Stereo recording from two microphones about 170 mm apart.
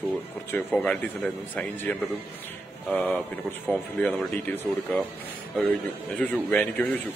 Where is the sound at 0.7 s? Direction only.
10° left (ahead or behind).